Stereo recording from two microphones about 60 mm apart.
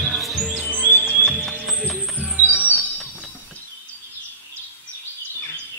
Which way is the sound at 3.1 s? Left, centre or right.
Left.